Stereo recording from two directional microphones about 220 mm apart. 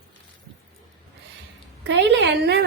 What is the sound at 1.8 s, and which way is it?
Speech, 55° right (ahead or behind).